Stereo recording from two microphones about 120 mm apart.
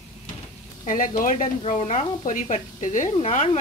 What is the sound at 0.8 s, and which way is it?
Speech, 90° left.